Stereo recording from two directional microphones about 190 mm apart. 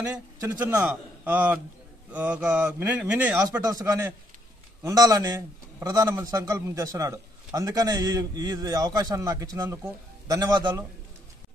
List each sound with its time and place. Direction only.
0.1 s a man's voice: 10° right (ahead or behind)